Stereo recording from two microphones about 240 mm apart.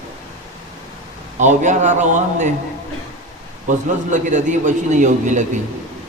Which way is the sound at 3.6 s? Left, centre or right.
Right.